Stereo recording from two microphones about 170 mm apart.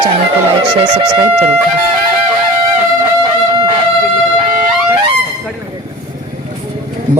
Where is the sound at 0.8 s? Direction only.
25° right (ahead or behind).